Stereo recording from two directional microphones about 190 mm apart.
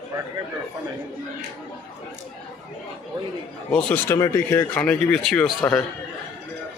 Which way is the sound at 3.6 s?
10° left (ahead or behind).